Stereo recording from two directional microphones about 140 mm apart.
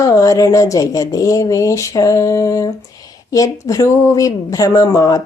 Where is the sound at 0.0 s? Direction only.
25° left (ahead or behind).